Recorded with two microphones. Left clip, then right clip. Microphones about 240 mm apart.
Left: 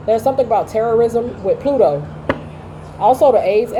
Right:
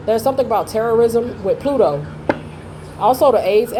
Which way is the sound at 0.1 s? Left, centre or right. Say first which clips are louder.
Left 2 dB; right.